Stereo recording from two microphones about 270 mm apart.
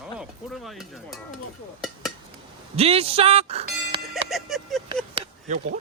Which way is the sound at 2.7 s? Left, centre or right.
Right.